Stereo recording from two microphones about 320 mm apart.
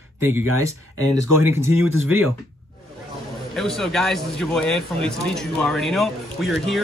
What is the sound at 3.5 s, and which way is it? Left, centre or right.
Speech, centre.